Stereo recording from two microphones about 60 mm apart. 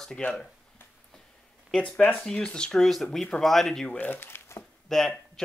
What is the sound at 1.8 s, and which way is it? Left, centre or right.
Speech, centre.